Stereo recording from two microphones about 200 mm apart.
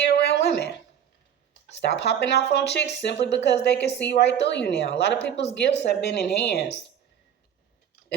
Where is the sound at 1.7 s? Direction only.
60° left (ahead or behind).